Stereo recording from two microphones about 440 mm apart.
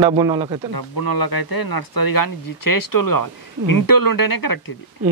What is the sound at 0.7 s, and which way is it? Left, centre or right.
Speech, left.